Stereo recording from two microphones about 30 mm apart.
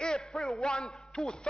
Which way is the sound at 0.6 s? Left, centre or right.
Left.